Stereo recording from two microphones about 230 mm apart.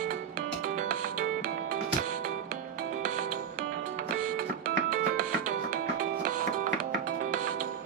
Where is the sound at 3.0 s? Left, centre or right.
Right.